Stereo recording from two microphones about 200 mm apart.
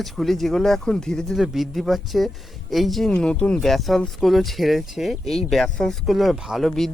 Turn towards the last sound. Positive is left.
turn(degrees=0)  # may be behind; listen again after turning